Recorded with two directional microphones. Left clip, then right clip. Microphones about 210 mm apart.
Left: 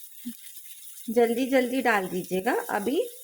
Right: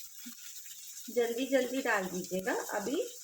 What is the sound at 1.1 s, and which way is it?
Speech, 45° left (ahead or behind).